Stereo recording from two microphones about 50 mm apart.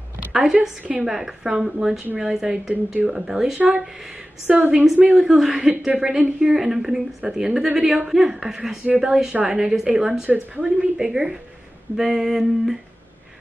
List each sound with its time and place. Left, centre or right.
0.3 s a woman's voice: centre
0.6 s a woman's voice: right
1.0 s a woman's voice: centre
4.5 s a woman's voice: right
5.0 s a sound: centre
5.9 s a woman's voice: centre
9.3 s a woman's voice: centre
9.6 s a woman's voice: centre
12.0 s a sound: centre